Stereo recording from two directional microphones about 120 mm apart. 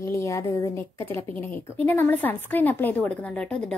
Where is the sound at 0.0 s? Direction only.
25° left (ahead or behind).